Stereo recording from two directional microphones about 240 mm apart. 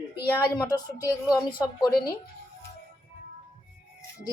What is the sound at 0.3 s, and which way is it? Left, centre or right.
A woman's voice, centre.